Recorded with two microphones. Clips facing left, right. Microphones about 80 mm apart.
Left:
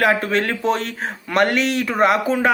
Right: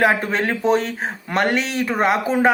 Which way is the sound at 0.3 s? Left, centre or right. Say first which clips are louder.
Right 1 dB; centre.